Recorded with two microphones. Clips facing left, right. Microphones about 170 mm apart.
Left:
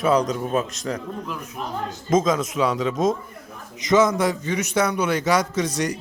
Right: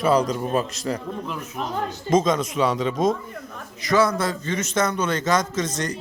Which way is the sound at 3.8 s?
20° left (ahead or behind).